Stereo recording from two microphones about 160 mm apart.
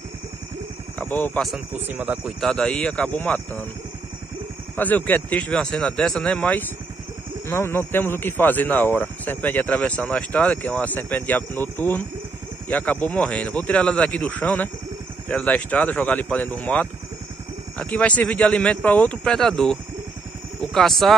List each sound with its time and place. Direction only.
0.9 s speech: 10° left (ahead or behind)
1.7 s speech: 10° right (ahead or behind); by 3.6 s 10° left (ahead or behind)
4.7 s speech: 10° left (ahead or behind)